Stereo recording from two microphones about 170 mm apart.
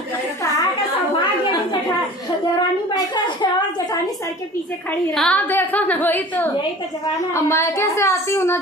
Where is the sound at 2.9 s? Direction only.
25° left (ahead or behind).